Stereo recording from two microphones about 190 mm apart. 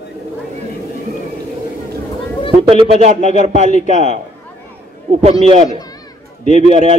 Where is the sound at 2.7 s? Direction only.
30° right (ahead or behind).